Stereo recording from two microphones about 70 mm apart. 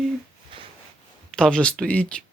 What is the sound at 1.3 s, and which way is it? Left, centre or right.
Speech, centre.